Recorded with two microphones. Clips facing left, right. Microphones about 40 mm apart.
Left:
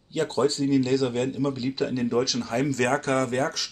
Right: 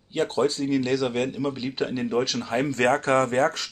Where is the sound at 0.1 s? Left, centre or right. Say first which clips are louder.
Even; right.